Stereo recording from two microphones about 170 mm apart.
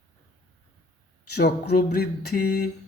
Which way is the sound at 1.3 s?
70° left (ahead or behind).